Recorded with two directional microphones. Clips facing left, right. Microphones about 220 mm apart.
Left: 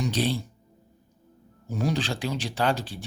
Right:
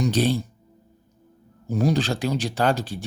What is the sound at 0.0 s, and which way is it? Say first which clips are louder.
Speech: right 5 dB; 45° right (ahead or behind).